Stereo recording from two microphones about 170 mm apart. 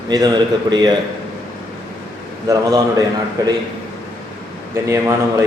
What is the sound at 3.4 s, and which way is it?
Speech, 20° right (ahead or behind).